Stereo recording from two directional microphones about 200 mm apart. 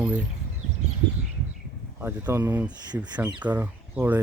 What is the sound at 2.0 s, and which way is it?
Speech, 10° right (ahead or behind).